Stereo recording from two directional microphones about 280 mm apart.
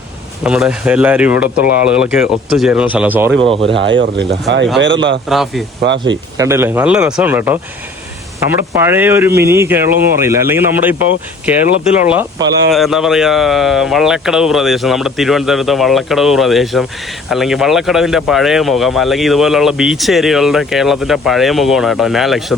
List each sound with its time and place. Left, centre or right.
0.4 s speech: centre
3.4 s speech: centre
3.8 s speech: right
5.3 s speech: centre
5.8 s speech: right
6.3 s a man's voice: centre
12.0 s speech: centre